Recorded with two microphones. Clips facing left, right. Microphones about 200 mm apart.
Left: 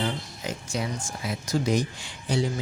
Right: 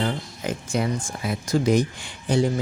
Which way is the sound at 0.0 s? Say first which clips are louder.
Right 4 dB; 55° right (ahead or behind).